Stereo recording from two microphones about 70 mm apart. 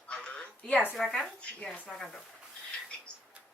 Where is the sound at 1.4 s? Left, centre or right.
Centre.